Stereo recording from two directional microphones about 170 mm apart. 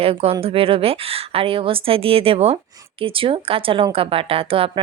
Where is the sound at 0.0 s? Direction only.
35° right (ahead or behind).